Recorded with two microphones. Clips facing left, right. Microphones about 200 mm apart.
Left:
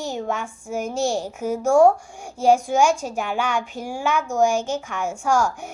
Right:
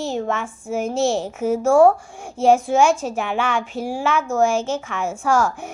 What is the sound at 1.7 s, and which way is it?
Speech, 5° right (ahead or behind).